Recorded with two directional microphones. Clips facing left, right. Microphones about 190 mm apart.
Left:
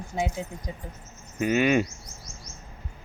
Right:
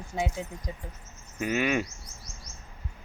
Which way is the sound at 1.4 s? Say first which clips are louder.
Left 5 dB; centre (ahead or behind).